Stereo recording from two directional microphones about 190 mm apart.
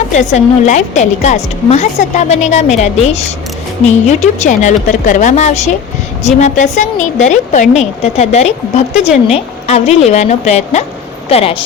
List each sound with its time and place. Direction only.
0.2 s a woman's voice: 40° left (ahead or behind)